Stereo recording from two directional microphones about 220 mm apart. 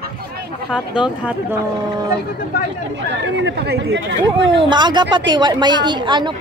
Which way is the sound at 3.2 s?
50° right (ahead or behind).